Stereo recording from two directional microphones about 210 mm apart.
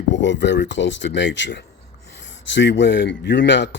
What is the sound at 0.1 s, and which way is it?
Speech, 60° left (ahead or behind).